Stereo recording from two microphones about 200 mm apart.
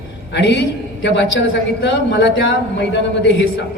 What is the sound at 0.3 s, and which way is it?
A man's voice, 60° left (ahead or behind).